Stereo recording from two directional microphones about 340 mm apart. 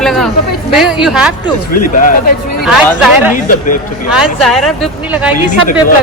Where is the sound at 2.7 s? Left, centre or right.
Centre.